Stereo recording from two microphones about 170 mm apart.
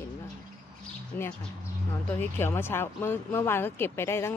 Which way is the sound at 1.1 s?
10° left (ahead or behind).